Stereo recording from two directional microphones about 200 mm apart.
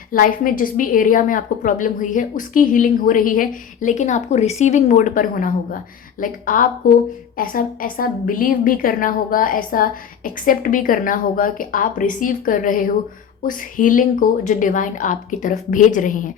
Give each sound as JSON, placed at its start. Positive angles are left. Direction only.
{"t": 0.1, "sound": "a woman's voice", "side_deg": 45}